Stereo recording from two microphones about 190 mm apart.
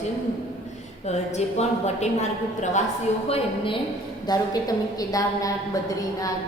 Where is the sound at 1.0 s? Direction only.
35° left (ahead or behind).